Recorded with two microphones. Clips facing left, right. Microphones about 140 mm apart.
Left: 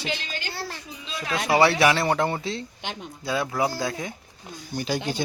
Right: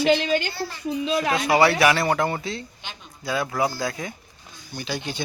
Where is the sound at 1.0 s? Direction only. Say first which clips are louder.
Right 10 dB; 60° right (ahead or behind).